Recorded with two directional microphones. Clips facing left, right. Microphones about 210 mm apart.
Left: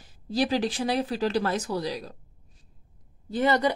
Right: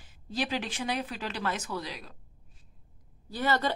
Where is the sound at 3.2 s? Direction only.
20° left (ahead or behind).